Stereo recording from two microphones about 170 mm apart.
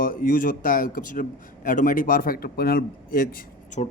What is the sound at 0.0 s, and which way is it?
A man's voice, 55° left (ahead or behind).